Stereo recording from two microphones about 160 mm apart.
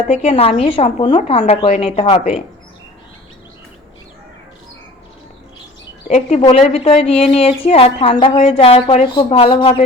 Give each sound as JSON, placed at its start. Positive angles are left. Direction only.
{"t": 0.1, "sound": "a woman's voice", "side_deg": 40}
{"t": 6.1, "sound": "a woman's voice", "side_deg": 45}
{"t": 9.1, "sound": "a woman's voice", "side_deg": 30}